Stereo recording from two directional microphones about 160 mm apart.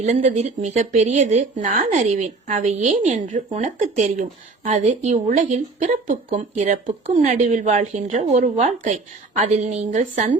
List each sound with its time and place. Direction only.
0.0 s speech: 50° right (ahead or behind)